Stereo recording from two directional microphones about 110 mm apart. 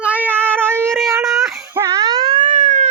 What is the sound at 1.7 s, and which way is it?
Wail, 30° right (ahead or behind).